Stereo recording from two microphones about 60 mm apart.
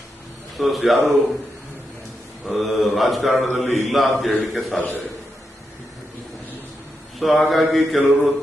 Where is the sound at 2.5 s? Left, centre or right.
Centre.